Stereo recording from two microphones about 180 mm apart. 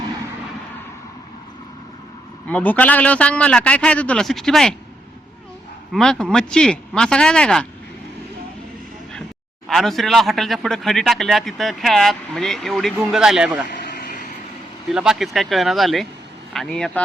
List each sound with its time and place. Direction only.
2.5 s a man's voice: 5° left (ahead or behind)
5.9 s speech: 5° left (ahead or behind)
9.6 s speech: centre (ahead or behind)
13.7 s vehicle: 55° left (ahead or behind)
14.9 s speech: 5° right (ahead or behind)